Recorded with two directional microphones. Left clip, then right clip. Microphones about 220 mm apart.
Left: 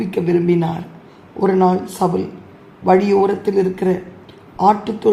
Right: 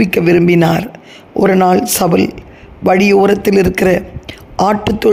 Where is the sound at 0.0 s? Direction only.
50° right (ahead or behind).